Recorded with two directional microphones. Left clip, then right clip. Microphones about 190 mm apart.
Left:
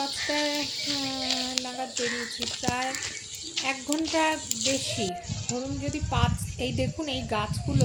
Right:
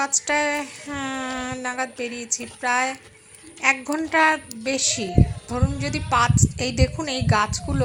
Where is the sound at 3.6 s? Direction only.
15° right (ahead or behind).